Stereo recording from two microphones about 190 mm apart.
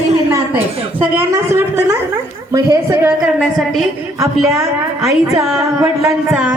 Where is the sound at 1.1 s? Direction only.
15° right (ahead or behind).